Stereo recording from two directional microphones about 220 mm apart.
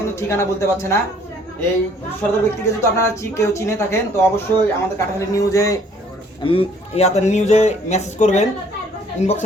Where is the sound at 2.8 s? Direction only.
15° left (ahead or behind).